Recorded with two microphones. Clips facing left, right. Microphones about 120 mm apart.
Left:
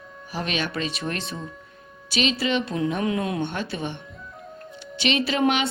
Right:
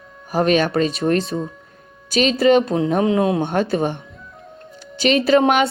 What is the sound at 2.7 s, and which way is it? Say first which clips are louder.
Speech: right 7 dB; 30° right (ahead or behind).